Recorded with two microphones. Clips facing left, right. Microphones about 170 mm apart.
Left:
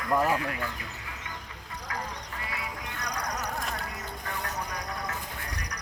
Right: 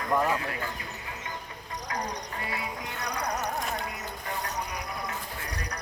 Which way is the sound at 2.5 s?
30° right (ahead or behind).